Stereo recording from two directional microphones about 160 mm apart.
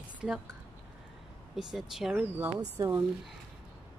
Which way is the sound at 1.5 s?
Centre (ahead or behind).